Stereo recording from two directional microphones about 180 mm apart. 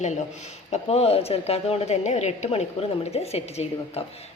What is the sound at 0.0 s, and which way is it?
Speech, 40° left (ahead or behind).